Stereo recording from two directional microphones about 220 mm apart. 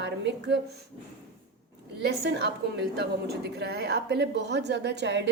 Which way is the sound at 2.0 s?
50° right (ahead or behind).